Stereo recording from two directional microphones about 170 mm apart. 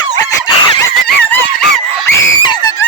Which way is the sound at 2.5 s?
20° left (ahead or behind).